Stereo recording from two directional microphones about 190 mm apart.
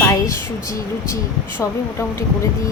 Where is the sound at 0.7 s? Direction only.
15° left (ahead or behind).